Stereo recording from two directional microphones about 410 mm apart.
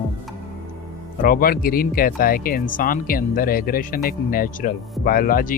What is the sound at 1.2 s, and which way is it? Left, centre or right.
Speech, left.